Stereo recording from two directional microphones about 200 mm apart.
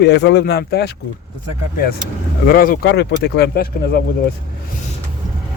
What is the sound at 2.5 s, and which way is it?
Speech, 45° left (ahead or behind).